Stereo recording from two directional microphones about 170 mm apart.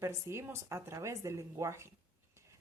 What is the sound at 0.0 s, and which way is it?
Speech, 15° right (ahead or behind).